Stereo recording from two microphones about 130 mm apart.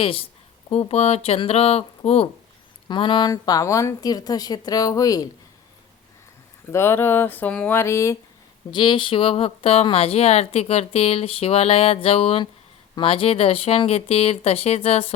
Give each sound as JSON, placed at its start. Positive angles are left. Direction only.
{"t": 0.0, "sound": "speech", "side_deg": 45}
{"t": 2.9, "sound": "speech", "side_deg": 35}
{"t": 6.7, "sound": "speech", "side_deg": 20}
{"t": 8.7, "sound": "speech", "side_deg": 40}